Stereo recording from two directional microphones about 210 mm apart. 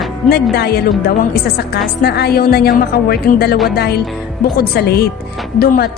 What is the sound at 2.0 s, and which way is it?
Speech, 50° left (ahead or behind).